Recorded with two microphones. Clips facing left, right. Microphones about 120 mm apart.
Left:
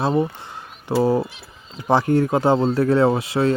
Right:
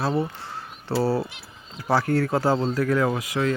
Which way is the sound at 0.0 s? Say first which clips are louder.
Left 5 dB; 20° left (ahead or behind).